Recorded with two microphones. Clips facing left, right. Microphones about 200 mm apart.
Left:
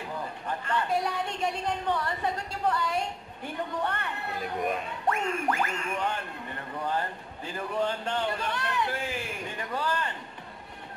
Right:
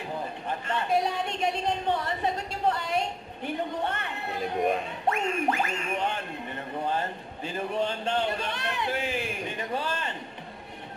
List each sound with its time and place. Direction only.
0.5 s a woman's voice: 25° right (ahead or behind)